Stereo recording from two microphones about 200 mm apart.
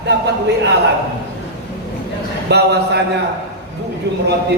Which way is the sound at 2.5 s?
55° right (ahead or behind).